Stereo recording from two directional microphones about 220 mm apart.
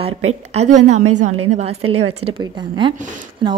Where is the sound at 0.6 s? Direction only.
30° right (ahead or behind).